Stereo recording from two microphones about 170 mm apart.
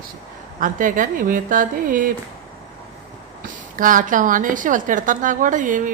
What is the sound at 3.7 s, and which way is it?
A woman's voice, 50° right (ahead or behind).